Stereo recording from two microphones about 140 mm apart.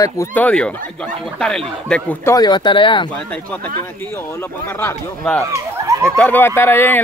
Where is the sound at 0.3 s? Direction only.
10° left (ahead or behind).